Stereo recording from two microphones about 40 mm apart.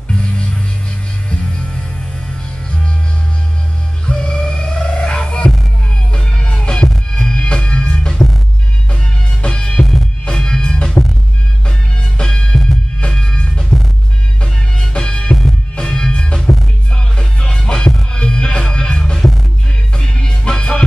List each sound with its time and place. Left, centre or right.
4.1 s a sound: centre
5.2 s music: left
9.4 s music: left